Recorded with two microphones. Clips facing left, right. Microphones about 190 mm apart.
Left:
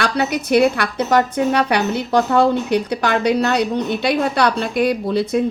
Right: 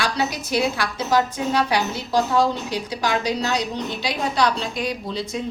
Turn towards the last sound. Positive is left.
turn(degrees=60)  # may be behind; listen again after turning